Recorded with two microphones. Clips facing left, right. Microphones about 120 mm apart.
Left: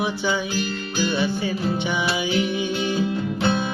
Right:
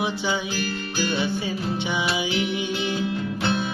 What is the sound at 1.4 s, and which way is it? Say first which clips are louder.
Music: left 3 dB; 55° left (ahead or behind).